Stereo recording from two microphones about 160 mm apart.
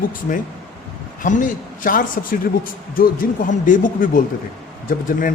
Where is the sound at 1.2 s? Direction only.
55° left (ahead or behind).